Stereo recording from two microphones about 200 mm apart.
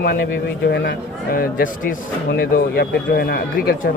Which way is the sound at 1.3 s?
45° left (ahead or behind).